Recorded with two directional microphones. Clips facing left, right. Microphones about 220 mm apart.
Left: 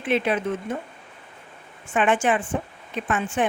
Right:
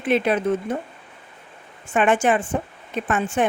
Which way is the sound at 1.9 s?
40° right (ahead or behind).